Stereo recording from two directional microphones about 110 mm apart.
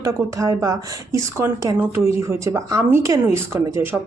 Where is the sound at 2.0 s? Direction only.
25° right (ahead or behind).